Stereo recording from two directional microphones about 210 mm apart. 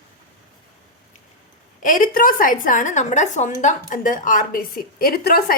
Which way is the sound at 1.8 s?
40° left (ahead or behind).